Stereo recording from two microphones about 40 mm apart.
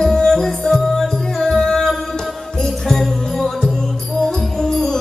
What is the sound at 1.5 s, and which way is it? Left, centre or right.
Music, centre.